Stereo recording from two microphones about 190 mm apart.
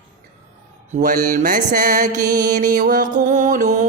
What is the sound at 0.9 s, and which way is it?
Speech, 45° right (ahead or behind).